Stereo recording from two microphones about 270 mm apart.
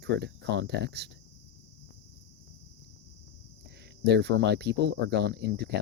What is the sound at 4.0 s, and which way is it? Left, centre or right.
Speech, right.